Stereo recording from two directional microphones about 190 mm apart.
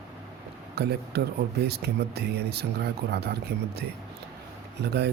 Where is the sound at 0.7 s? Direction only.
60° right (ahead or behind).